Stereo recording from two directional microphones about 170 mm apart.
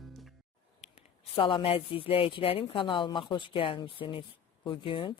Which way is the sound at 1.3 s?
30° left (ahead or behind).